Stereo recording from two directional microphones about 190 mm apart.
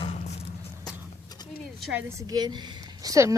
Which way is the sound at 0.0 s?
35° left (ahead or behind).